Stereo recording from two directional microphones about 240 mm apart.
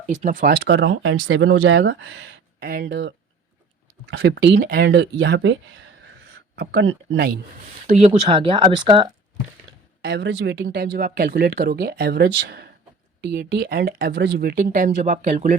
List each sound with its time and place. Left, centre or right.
0.0 s speech: right
4.2 s speech: right
6.6 s speech: right
7.9 s speech: right
10.0 s speech: right